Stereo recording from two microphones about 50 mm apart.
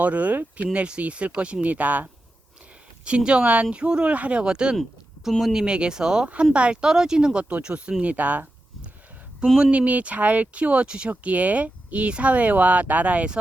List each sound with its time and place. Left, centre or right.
0.0 s speech: right
3.0 s speech: centre
5.4 s speech: centre
5.6 s speech: centre
8.1 s speech: right
9.6 s speech: centre
9.8 s speech: right